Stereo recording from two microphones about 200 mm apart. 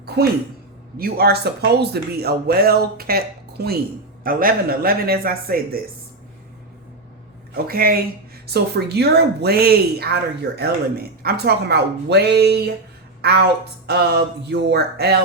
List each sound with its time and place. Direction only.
0.0 s a sound: 50° right (ahead or behind)
0.9 s speech: 50° right (ahead or behind)
7.5 s speech: 45° right (ahead or behind)
13.8 s speech: 55° right (ahead or behind)